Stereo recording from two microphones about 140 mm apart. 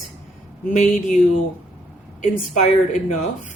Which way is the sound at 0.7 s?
65° left (ahead or behind).